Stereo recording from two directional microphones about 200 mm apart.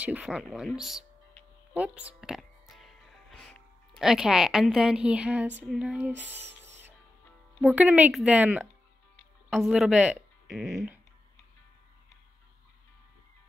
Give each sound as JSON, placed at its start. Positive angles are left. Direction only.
{"t": 0.0, "sound": "a woman's voice", "side_deg": -5}
{"t": 1.7, "sound": "music", "side_deg": -5}
{"t": 4.0, "sound": "a woman's voice", "side_deg": 0}
{"t": 7.6, "sound": "a woman's voice", "side_deg": -5}